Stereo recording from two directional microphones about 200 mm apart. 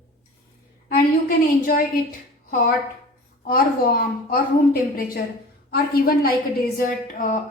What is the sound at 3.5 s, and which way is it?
Speech, 45° left (ahead or behind).